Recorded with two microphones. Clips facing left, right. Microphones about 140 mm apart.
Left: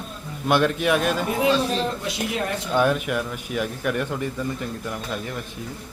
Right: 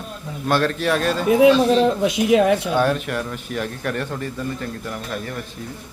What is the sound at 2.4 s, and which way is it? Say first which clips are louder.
Speech: right 10 dB; 90° right.